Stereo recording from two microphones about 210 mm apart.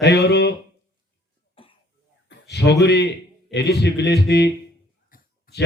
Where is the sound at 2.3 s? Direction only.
55° left (ahead or behind).